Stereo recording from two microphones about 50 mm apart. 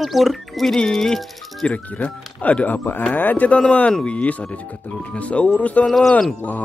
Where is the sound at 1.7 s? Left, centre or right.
Left.